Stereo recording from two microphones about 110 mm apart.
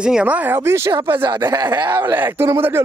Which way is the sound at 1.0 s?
45° right (ahead or behind).